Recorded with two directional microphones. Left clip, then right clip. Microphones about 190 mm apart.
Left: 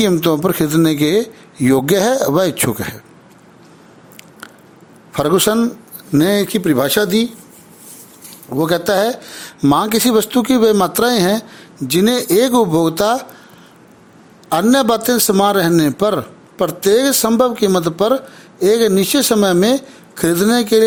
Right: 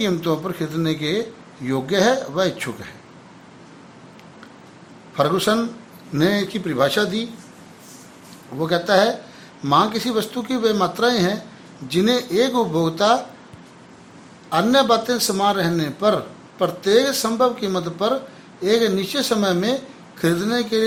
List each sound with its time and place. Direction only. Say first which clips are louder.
0.0 s a man's voice: left 8 dB; 55° left (ahead or behind)
5.1 s a man's voice: left 4 dB; 55° left (ahead or behind)
8.5 s a man's voice: left 3 dB; 60° left (ahead or behind)
14.5 s a man's voice: left 3 dB; 55° left (ahead or behind)